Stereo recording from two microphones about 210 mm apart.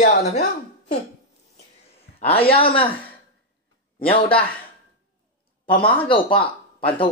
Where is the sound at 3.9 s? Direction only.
25° left (ahead or behind).